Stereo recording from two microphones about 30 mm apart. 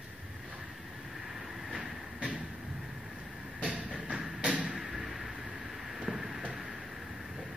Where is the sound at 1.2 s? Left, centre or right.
Centre.